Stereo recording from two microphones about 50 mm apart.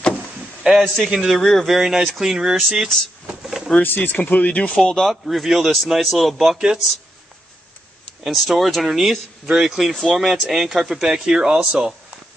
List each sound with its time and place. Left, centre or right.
0.7 s speech: centre
1.3 s speech: centre
3.4 s pigeon: centre
3.8 s speech: left
4.8 s speech: centre
5.1 s speech: centre
8.3 s speech: centre
9.9 s speech: centre